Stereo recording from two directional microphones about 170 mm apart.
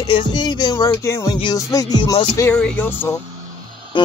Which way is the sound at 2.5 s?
10° left (ahead or behind).